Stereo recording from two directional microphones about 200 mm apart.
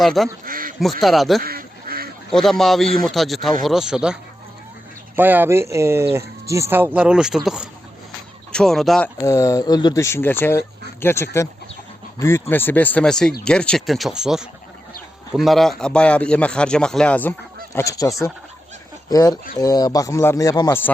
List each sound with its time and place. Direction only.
0.0 s speech: centre (ahead or behind)
0.4 s duck: 45° right (ahead or behind)
1.0 s speech: centre (ahead or behind)
1.4 s goose: 50° right (ahead or behind)
2.3 s speech: centre (ahead or behind)
9.2 s speech: 15° left (ahead or behind)